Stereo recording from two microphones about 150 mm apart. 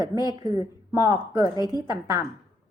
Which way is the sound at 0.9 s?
25° right (ahead or behind).